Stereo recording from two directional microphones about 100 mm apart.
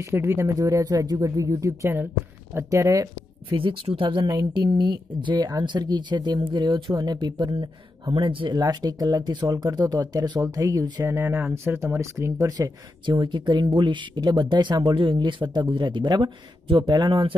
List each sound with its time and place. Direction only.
0.0 s speech: 25° right (ahead or behind)
0.6 s speech: 35° right (ahead or behind)
3.5 s speech: 65° right (ahead or behind)
4.6 s speech: 45° right (ahead or behind)
8.1 s speech: 60° right (ahead or behind)
8.5 s speech: 40° right (ahead or behind)
11.1 s speech: 25° right (ahead or behind)
13.0 s speech: 50° right (ahead or behind)